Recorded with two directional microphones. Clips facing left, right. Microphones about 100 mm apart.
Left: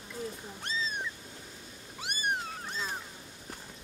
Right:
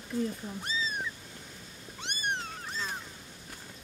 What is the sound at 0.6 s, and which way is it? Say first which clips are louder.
Cat: even; 5° right (ahead or behind).